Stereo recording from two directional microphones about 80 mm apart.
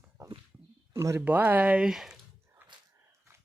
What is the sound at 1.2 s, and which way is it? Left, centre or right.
Speech, right.